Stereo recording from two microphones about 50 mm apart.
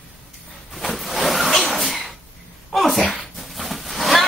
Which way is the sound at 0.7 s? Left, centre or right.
Centre.